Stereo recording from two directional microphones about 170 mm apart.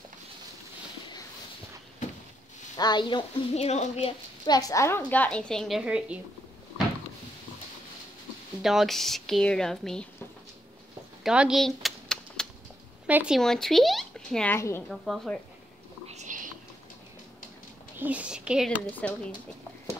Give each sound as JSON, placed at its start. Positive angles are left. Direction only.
{"t": 2.8, "sound": "speech", "side_deg": 25}
{"t": 3.5, "sound": "a woman's voice", "side_deg": 40}
{"t": 4.5, "sound": "a woman's voice", "side_deg": 20}
{"t": 8.6, "sound": "a woman's voice", "side_deg": 0}
{"t": 11.2, "sound": "door", "side_deg": -5}
{"t": 13.0, "sound": "speech", "side_deg": -5}
{"t": 14.9, "sound": "a woman's voice", "side_deg": 0}
{"t": 16.1, "sound": "whispering", "side_deg": -45}
{"t": 17.9, "sound": "speech", "side_deg": -10}
{"t": 18.9, "sound": "a woman's voice", "side_deg": 10}